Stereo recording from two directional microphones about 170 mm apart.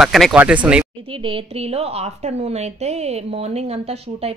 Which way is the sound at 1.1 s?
30° right (ahead or behind).